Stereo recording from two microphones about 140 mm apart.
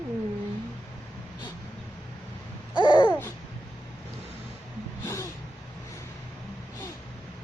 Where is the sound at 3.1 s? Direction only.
15° left (ahead or behind).